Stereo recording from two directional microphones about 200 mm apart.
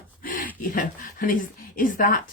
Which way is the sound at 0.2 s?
45° left (ahead or behind).